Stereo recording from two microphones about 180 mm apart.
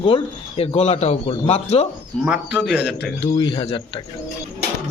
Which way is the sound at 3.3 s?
25° left (ahead or behind).